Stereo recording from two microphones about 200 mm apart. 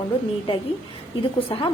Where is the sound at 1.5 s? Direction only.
25° left (ahead or behind).